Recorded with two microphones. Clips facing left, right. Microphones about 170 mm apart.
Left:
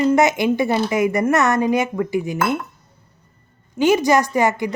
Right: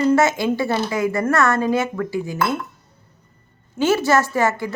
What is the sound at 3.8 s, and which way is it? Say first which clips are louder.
Speech: left 2 dB; 15° left (ahead or behind).